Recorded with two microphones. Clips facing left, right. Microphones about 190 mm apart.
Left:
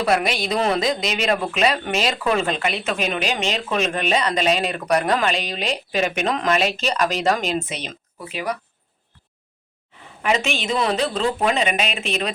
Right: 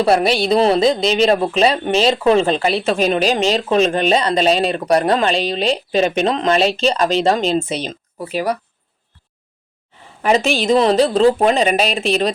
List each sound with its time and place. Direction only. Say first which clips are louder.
0.0 s speech: right 6 dB; 30° right (ahead or behind)
10.2 s speech: right 7 dB; 35° right (ahead or behind)